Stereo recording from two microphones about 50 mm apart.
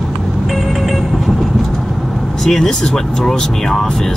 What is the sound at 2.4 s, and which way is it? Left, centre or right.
Speech, centre.